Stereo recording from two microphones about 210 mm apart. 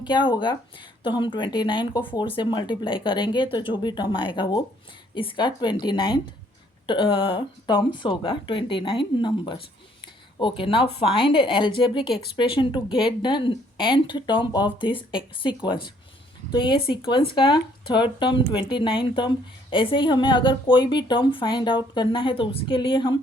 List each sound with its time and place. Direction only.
0.0 s a woman's voice: 20° left (ahead or behind)